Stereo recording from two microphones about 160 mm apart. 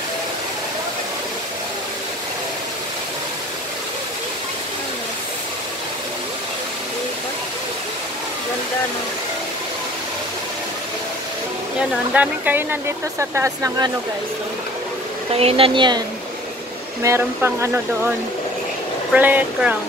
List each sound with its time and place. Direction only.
11.9 s speech: 10° right (ahead or behind)
15.3 s speech: 35° right (ahead or behind)
17.0 s speech: 15° right (ahead or behind)
19.1 s speech: 10° right (ahead or behind)